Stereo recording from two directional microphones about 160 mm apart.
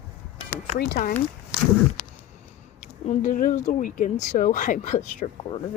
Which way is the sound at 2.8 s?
50° left (ahead or behind).